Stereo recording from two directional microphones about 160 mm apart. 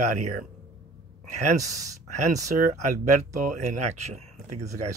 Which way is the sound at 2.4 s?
50° right (ahead or behind).